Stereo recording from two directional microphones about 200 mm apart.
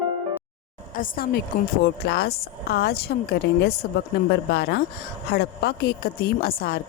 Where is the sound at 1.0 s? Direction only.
45° left (ahead or behind).